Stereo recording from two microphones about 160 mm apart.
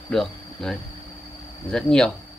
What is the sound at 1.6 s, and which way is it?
Speech, 5° left (ahead or behind).